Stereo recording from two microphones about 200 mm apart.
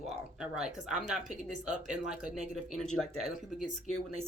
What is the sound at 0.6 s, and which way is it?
Speech, 5° right (ahead or behind).